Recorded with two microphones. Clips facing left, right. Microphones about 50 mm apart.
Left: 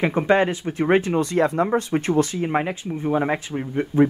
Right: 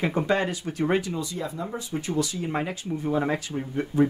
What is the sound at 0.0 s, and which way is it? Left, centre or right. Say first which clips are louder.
Speech: left 6 dB; left.